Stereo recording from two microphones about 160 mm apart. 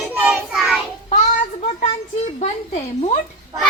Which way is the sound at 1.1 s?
45° left (ahead or behind).